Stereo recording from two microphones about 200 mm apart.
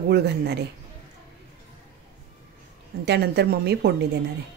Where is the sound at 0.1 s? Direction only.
55° right (ahead or behind).